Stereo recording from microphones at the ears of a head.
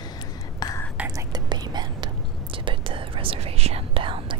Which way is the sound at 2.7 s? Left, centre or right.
Right.